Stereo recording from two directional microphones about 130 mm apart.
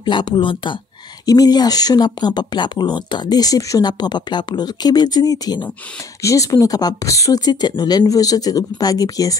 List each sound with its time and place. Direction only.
0.0 s speech: 35° left (ahead or behind)